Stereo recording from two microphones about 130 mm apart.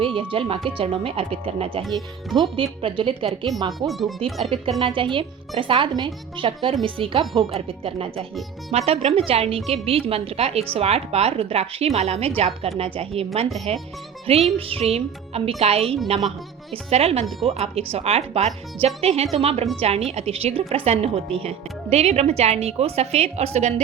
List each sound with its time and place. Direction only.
0.0 s a woman's voice: 45° right (ahead or behind)
2.3 s a woman's voice: 40° right (ahead or behind)
3.7 s speech: centre (ahead or behind)
4.8 s a woman's voice: 40° right (ahead or behind); by 23.7 s 55° right (ahead or behind)